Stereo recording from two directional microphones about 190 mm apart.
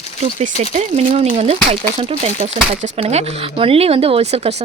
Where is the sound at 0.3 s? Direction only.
35° right (ahead or behind).